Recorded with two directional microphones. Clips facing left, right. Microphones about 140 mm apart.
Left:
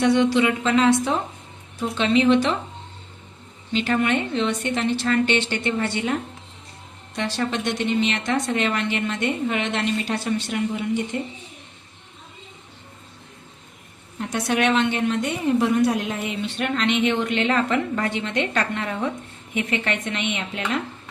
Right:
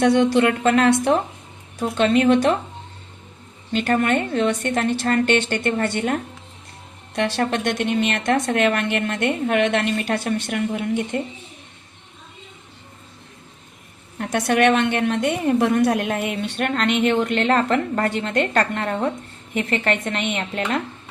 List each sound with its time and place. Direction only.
0.0 s a woman's voice: 50° right (ahead or behind)
3.7 s a woman's voice: 50° right (ahead or behind)
7.2 s a woman's voice: 55° right (ahead or behind)
14.2 s a woman's voice: 55° right (ahead or behind)